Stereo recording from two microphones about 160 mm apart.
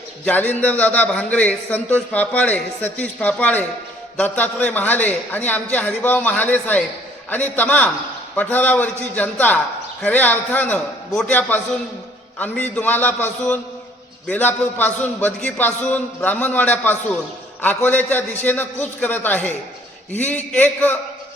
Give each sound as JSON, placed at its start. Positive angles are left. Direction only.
{"t": 0.3, "sound": "a man's voice", "side_deg": 10}
{"t": 12.7, "sound": "a man's voice", "side_deg": 10}